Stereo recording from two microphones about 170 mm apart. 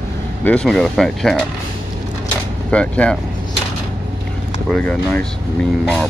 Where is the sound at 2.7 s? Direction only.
5° left (ahead or behind).